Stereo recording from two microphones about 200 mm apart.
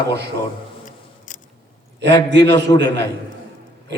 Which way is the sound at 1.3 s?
40° left (ahead or behind).